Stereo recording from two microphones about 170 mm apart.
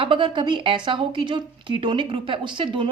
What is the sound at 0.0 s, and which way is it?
A woman's voice, 30° right (ahead or behind).